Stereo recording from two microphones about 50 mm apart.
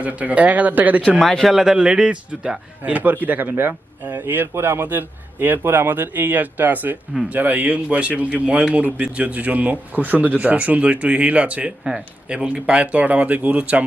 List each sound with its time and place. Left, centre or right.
0.0 s a man's voice: right
1.2 s speech: centre
1.5 s a man's voice: centre
2.8 s a man's voice: right
4.5 s speech: right; by 8.8 s centre
8.8 s a man's voice: right
11.8 s a man's voice: centre
12.3 s speech: centre